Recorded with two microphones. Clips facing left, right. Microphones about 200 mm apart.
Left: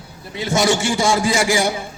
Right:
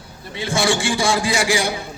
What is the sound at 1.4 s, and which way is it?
Speech, 45° left (ahead or behind).